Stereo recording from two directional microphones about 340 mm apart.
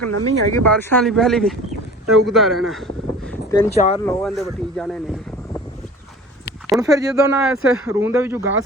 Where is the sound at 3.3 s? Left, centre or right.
Centre.